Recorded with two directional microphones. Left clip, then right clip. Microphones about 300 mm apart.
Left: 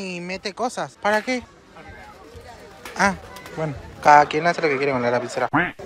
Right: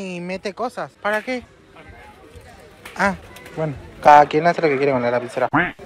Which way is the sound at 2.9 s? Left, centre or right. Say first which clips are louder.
Even; centre.